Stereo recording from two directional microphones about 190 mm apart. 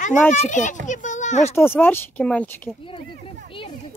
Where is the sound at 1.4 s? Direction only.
10° left (ahead or behind).